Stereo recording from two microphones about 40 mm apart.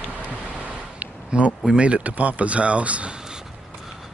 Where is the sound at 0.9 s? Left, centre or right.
Right.